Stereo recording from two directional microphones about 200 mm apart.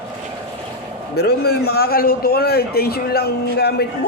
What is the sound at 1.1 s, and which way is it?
A man's voice, 55° left (ahead or behind).